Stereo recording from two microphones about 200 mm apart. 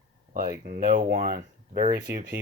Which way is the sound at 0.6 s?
45° right (ahead or behind).